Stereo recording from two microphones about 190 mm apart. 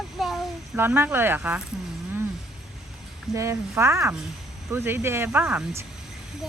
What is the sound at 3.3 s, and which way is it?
Speech, 15° right (ahead or behind).